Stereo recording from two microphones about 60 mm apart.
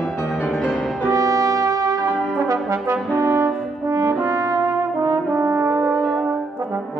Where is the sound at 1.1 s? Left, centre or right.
Right.